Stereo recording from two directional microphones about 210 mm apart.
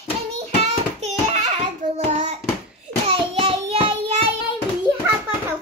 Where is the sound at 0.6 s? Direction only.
30° right (ahead or behind).